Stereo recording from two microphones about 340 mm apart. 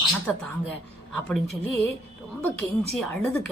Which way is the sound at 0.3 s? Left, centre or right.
Centre.